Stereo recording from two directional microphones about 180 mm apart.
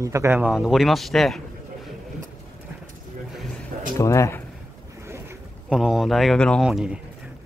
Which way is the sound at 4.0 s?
15° left (ahead or behind).